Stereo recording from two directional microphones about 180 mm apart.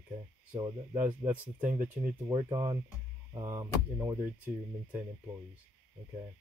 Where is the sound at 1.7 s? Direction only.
45° right (ahead or behind).